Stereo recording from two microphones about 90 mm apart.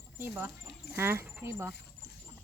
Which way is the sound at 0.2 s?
30° right (ahead or behind).